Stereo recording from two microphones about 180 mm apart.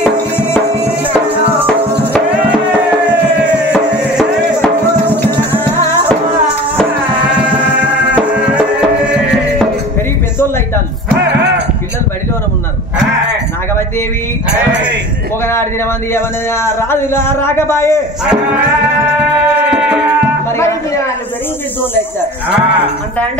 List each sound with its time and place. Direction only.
3.7 s music: 5° right (ahead or behind)
8.1 s music: 5° right (ahead or behind)
11.2 s music: 70° right (ahead or behind)
16.6 s speech: 15° left (ahead or behind)